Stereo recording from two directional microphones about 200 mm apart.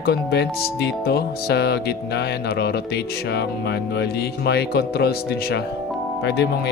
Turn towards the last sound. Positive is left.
turn(degrees=55)  # may be behind; listen again after turning